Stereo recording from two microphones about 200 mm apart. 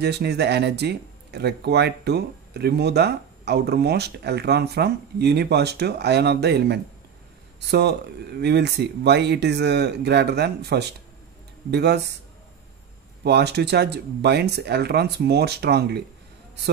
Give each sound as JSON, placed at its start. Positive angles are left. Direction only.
{"t": 0.0, "sound": "speech", "side_deg": -55}
{"t": 8.4, "sound": "speech", "side_deg": -55}
{"t": 13.2, "sound": "speech", "side_deg": -55}